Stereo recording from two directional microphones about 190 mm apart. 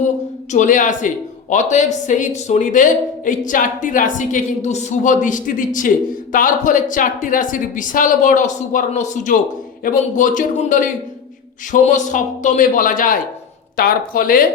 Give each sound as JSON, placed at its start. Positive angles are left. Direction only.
{"t": 0.5, "sound": "speech", "side_deg": 40}